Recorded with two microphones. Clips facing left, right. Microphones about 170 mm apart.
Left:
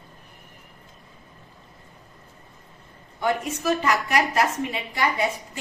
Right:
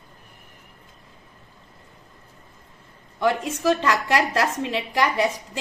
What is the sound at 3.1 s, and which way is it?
A woman's voice, 90° right.